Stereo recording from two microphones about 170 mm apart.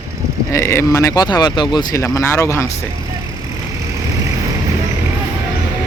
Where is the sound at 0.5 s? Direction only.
15° left (ahead or behind).